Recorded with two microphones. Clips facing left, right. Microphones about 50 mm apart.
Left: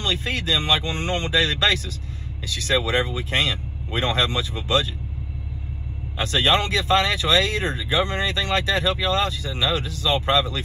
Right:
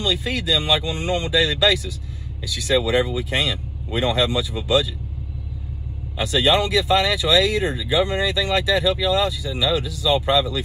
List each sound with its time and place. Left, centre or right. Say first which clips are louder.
0.0 s speech: right 2 dB; left
6.1 s speech: right 2 dB; left